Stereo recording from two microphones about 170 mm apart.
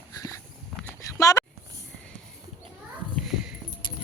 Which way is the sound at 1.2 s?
20° left (ahead or behind).